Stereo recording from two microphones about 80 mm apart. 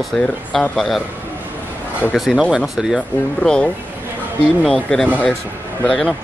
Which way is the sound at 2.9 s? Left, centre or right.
Centre.